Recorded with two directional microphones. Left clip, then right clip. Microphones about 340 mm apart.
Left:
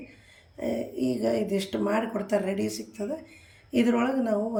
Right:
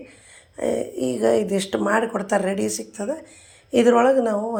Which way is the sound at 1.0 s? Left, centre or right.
Right.